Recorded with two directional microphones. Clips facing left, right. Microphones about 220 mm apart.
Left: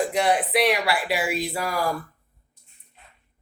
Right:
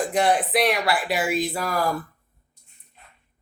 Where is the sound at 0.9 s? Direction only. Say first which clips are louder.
Right 1 dB; 10° left (ahead or behind).